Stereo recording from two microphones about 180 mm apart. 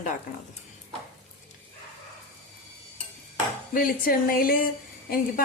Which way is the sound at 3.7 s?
50° left (ahead or behind).